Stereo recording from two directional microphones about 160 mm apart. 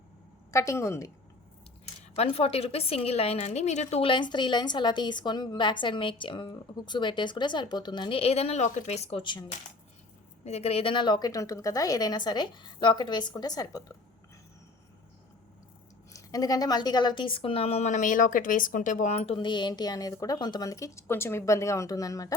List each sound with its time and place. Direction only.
0.5 s a woman's voice: 20° left (ahead or behind)
2.1 s a woman's voice: 35° left (ahead or behind)
10.4 s a woman's voice: 40° left (ahead or behind); by 13.9 s 25° left (ahead or behind)
16.1 s a woman's voice: 20° left (ahead or behind)